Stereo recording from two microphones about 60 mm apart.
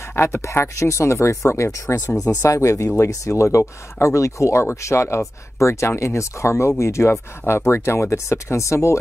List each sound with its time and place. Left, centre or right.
0.0 s speech: left
2.1 s speech: left